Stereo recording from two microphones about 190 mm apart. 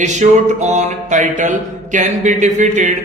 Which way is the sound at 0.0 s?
40° right (ahead or behind).